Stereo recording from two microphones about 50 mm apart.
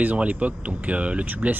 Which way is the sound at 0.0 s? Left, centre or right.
Right.